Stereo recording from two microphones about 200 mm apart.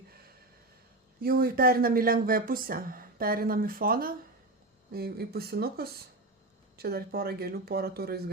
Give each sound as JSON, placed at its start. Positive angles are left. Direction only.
{"t": 1.2, "sound": "speech", "side_deg": -45}